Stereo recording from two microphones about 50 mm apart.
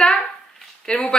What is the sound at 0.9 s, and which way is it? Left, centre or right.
Speech, centre.